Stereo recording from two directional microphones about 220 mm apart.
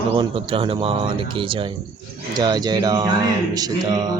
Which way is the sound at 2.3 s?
20° right (ahead or behind).